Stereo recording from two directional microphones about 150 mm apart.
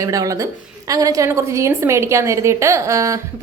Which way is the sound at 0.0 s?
20° right (ahead or behind).